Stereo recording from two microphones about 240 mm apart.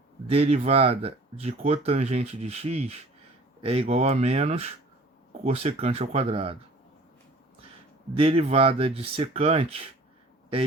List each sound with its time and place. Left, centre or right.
0.3 s speech: right
8.1 s speech: right